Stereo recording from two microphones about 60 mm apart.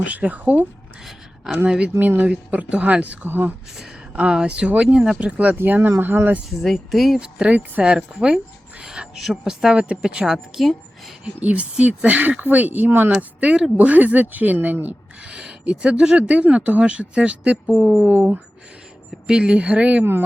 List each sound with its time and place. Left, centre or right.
0.1 s speech: right
1.6 s speech: centre
2.0 s speech: right
4.1 s speech: right
6.5 s speech: centre
7.3 s speech: centre
9.7 s speech: centre
10.3 s a woman's voice: centre
11.4 s speech: right
13.4 s speech: centre
15.2 s speech: centre
18.1 s speech: right
19.3 s speech: centre